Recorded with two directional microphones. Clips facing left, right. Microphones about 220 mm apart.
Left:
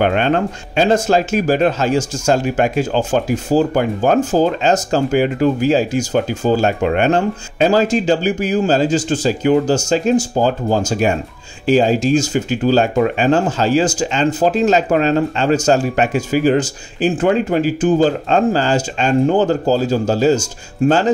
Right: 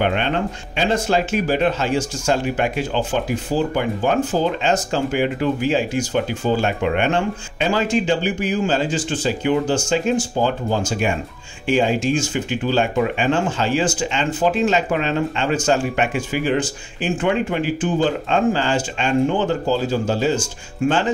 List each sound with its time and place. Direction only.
0.0 s speech: 45° left (ahead or behind)